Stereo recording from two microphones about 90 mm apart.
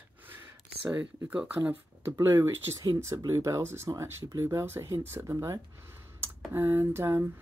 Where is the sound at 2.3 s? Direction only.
25° right (ahead or behind).